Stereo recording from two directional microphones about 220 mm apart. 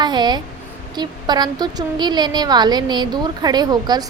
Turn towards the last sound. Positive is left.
turn(degrees=-20)  # may be behind; listen again after turning